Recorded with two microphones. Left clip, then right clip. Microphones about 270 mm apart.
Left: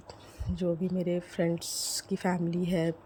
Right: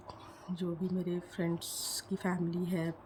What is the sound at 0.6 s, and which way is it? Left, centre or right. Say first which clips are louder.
Speech: left 7 dB; centre.